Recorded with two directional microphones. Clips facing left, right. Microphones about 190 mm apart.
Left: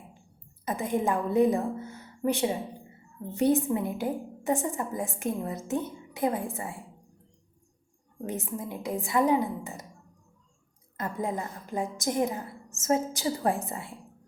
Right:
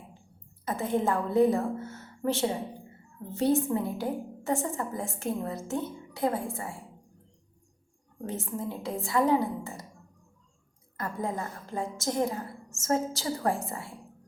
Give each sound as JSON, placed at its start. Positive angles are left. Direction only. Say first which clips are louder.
{"t": 0.6, "sound": "a woman's voice", "louder": "even", "side_deg": 15}
{"t": 8.3, "sound": "a woman's voice", "louder": "even", "side_deg": 15}
{"t": 10.9, "sound": "a woman's voice", "louder": "left 1 dB", "side_deg": 20}